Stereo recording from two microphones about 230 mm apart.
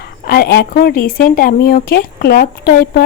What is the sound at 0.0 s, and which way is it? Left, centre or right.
Speech, left.